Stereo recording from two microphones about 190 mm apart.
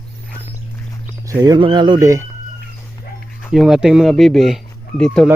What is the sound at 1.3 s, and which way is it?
Speech, 20° right (ahead or behind).